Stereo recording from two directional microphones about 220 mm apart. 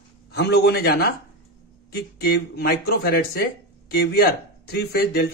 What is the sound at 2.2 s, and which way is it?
Speech, 45° left (ahead or behind).